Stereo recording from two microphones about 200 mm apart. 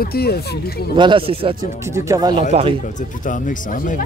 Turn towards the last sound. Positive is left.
turn(degrees=40)  # may be behind; listen again after turning